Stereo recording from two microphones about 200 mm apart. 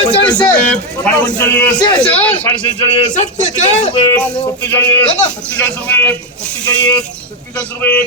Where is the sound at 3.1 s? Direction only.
40° left (ahead or behind).